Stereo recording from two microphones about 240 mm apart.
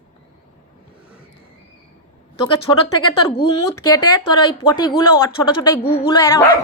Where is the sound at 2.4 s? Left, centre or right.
Left.